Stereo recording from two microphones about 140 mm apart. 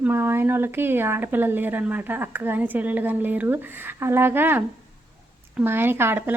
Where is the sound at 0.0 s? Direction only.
15° right (ahead or behind).